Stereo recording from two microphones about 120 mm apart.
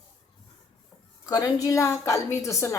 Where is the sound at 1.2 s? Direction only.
30° left (ahead or behind).